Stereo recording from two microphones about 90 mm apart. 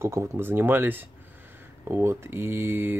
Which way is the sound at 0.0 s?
30° right (ahead or behind).